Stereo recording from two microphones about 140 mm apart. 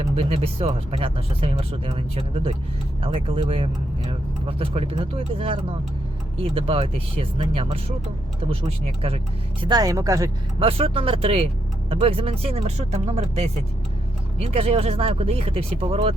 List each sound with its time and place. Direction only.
0.2 s speech: 45° right (ahead or behind)
9.6 s speech: 25° right (ahead or behind)
10.6 s speech: 40° right (ahead or behind)